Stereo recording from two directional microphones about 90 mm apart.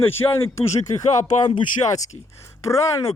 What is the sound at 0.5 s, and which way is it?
Speech, 35° left (ahead or behind).